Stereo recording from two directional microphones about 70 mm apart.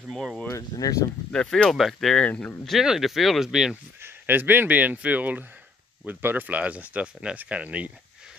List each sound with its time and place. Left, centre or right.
0.1 s speech: centre
0.5 s speech: left
1.3 s speech: centre
1.7 s speech: centre
2.2 s speech: centre
2.8 s speech: centre
4.0 s speech: right